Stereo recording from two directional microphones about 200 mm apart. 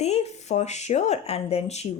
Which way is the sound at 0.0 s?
35° left (ahead or behind).